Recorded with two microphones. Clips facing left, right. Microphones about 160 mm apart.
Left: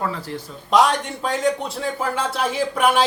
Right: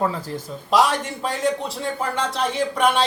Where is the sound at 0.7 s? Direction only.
Centre (ahead or behind).